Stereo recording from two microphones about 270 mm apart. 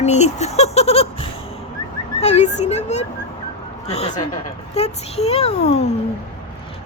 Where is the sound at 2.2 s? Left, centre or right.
Left.